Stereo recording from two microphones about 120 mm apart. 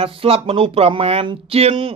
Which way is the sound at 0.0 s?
50° right (ahead or behind).